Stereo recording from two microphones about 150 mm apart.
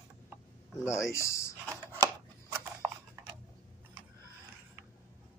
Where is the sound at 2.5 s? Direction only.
15° right (ahead or behind).